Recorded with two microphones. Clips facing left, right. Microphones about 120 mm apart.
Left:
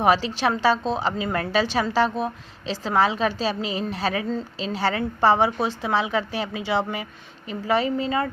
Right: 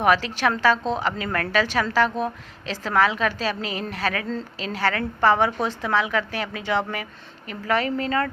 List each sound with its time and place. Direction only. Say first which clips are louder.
0.0 s a woman's voice: even; 25° left (ahead or behind)